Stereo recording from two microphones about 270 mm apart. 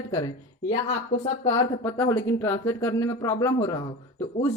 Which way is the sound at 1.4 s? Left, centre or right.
Centre.